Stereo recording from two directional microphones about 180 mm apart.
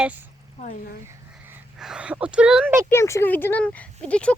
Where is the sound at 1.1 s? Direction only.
10° right (ahead or behind).